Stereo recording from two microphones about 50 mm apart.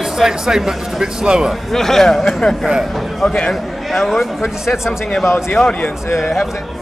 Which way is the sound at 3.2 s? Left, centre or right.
Centre.